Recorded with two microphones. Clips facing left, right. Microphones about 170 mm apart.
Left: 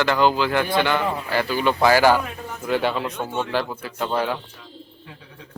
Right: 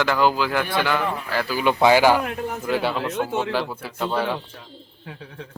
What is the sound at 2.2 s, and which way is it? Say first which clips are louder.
Speech: right 6 dB; 70° right (ahead or behind).